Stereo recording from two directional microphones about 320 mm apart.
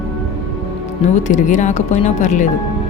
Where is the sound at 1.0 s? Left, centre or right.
Left.